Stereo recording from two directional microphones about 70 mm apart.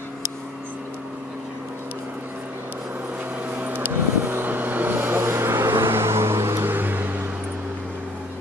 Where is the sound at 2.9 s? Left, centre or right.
Right.